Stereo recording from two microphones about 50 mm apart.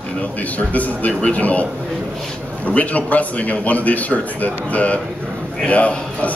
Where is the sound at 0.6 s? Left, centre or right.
Left.